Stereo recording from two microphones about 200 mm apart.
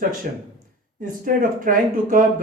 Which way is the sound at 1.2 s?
45° right (ahead or behind).